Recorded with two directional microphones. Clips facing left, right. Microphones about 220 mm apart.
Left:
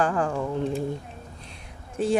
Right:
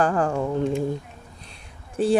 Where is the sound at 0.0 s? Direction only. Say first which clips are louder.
Right 3 dB; 40° right (ahead or behind).